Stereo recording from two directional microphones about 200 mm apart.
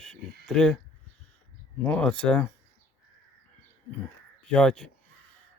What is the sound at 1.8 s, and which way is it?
Speech, 5° left (ahead or behind).